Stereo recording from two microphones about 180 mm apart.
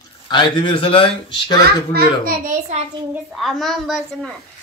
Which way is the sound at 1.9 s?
55° right (ahead or behind).